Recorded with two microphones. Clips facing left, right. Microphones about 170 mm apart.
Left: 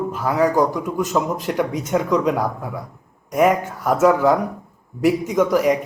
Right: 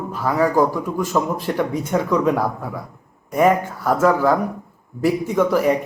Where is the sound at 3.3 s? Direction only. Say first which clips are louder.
Even; 5° left (ahead or behind).